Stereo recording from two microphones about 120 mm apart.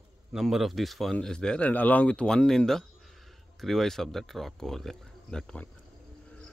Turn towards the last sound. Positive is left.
turn(degrees=5)  # may be behind; listen again after turning